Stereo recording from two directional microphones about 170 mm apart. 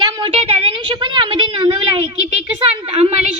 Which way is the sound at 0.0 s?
30° right (ahead or behind).